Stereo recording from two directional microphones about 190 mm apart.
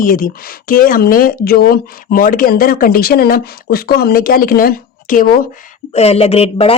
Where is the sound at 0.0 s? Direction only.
45° left (ahead or behind).